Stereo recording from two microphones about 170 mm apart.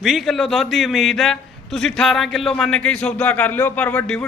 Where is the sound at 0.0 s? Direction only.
Centre (ahead or behind).